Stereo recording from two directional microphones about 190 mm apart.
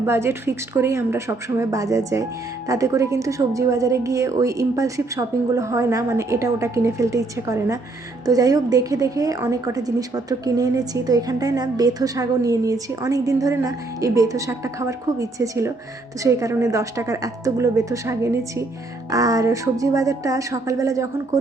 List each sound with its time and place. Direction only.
0.0 s a woman's voice: 15° right (ahead or behind)